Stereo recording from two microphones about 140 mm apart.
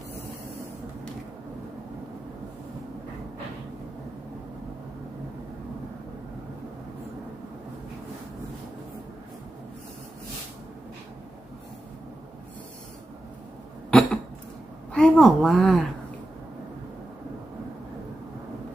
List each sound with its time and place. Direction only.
13.9 s cough: 5° left (ahead or behind)
14.9 s a woman's voice: 5° left (ahead or behind)